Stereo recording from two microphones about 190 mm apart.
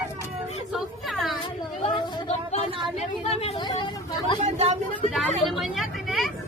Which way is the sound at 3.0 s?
30° left (ahead or behind).